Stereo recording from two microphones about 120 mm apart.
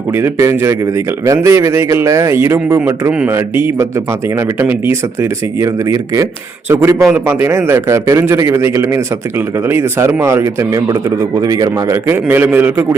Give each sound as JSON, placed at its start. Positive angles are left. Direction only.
{"t": 0.2, "sound": "a man's voice", "side_deg": -20}
{"t": 3.1, "sound": "a man's voice", "side_deg": -10}
{"t": 3.3, "sound": "a man's voice", "side_deg": -20}
{"t": 12.0, "sound": "a man's voice", "side_deg": -15}